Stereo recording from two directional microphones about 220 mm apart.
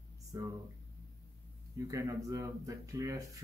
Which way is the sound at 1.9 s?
15° right (ahead or behind).